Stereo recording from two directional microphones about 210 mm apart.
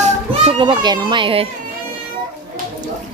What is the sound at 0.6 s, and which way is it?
Speech, 20° right (ahead or behind).